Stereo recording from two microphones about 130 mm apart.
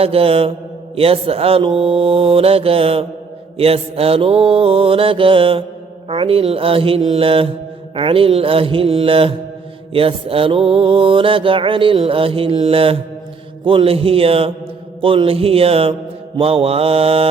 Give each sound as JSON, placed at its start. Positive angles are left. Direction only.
{"t": 0.0, "sound": "mantra", "side_deg": -45}